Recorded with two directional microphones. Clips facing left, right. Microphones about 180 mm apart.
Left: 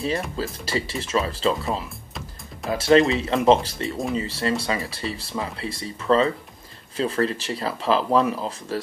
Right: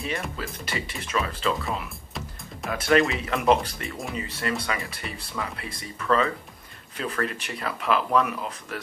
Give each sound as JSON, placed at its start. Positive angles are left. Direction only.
{"t": 0.4, "sound": "speech", "side_deg": 30}